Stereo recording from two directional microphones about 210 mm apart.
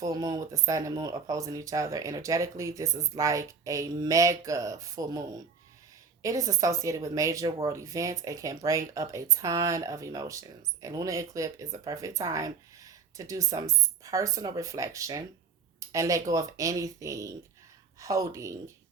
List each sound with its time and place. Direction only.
0.0 s speech: 15° right (ahead or behind)